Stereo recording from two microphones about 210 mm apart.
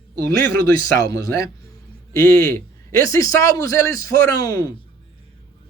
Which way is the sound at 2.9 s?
15° left (ahead or behind).